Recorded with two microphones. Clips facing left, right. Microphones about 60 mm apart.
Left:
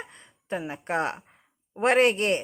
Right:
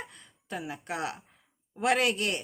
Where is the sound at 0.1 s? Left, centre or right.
Left.